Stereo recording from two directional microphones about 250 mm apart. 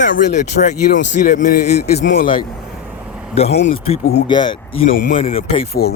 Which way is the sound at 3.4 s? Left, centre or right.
Left.